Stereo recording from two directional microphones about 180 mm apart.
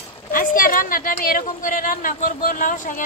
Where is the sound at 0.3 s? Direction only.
50° left (ahead or behind).